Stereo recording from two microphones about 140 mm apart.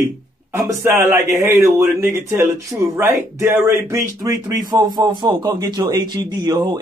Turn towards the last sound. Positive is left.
turn(degrees=-30)  # may be behind; listen again after turning